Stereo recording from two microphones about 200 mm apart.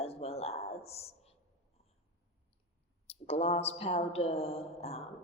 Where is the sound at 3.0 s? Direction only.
30° left (ahead or behind).